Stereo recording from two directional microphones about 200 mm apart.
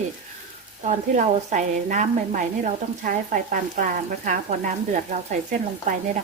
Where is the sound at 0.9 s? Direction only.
35° right (ahead or behind).